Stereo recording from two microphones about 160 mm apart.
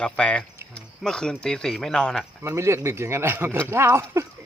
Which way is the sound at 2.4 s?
15° right (ahead or behind).